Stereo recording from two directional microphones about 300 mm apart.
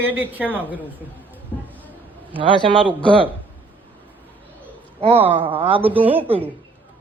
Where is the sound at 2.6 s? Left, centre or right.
Centre.